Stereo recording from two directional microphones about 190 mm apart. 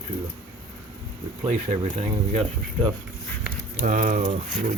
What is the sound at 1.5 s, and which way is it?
Speech, 35° right (ahead or behind).